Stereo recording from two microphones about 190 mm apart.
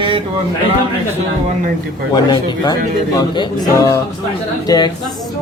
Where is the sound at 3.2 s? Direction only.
20° left (ahead or behind).